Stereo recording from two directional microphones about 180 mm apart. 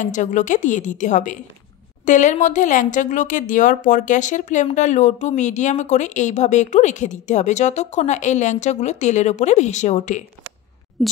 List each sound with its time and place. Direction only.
0.0 s a woman's voice: 45° left (ahead or behind)
11.0 s speech: centre (ahead or behind)